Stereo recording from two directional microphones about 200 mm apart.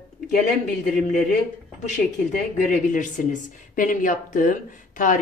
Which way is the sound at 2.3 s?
40° left (ahead or behind).